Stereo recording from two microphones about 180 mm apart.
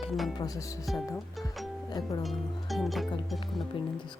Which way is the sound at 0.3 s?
20° left (ahead or behind).